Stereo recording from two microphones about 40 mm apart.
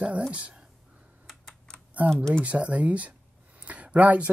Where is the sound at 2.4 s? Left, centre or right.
Right.